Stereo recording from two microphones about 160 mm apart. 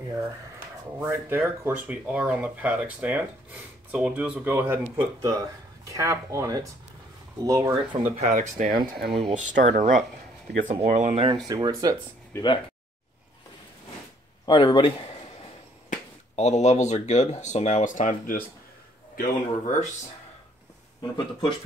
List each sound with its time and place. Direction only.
0.9 s speech: 15° right (ahead or behind)
8.2 s speech: 50° right (ahead or behind); by 9.1 s 75° right (ahead or behind)
9.3 s speech: 50° right (ahead or behind)
11.4 s speech: 25° right (ahead or behind)
12.3 s speech: 15° left (ahead or behind)
14.4 s speech: 30° left (ahead or behind)
15.9 s speech: 45° left (ahead or behind)
21.0 s speech: 30° left (ahead or behind)